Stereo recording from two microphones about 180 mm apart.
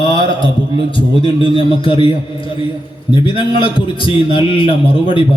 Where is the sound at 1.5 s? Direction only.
30° left (ahead or behind).